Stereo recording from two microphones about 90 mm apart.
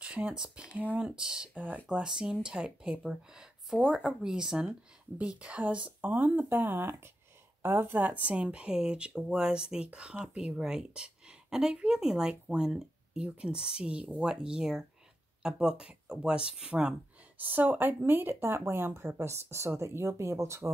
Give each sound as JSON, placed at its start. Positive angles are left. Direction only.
{"t": 0.0, "sound": "speech", "side_deg": -15}
{"t": 17.4, "sound": "speech", "side_deg": -20}